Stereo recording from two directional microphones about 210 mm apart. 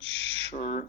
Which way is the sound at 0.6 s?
30° left (ahead or behind).